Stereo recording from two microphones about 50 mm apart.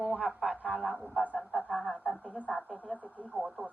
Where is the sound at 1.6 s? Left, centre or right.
Left.